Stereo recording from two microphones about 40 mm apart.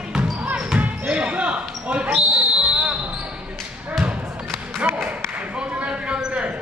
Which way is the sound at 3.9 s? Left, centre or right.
Centre.